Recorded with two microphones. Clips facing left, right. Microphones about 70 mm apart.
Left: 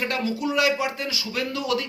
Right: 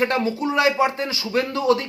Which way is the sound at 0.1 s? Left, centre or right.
Right.